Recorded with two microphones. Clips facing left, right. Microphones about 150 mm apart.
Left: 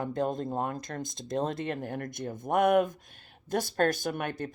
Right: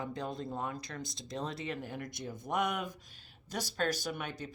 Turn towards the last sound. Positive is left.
turn(degrees=55)  # may be behind; listen again after turning